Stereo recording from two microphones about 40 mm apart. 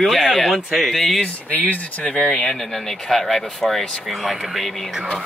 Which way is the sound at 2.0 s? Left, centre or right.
Left.